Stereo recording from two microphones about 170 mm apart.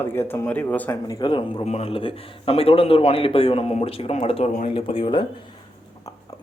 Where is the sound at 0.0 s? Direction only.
15° left (ahead or behind).